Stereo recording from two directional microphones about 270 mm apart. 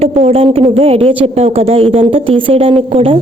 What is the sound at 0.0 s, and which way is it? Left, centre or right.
A woman's voice, right.